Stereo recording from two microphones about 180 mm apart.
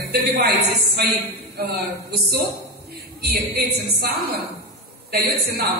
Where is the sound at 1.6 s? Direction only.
60° right (ahead or behind).